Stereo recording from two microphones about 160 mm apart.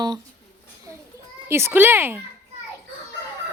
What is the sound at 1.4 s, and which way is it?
Speech, 15° right (ahead or behind).